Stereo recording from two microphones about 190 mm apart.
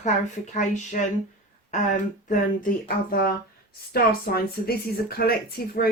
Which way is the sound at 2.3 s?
50° left (ahead or behind).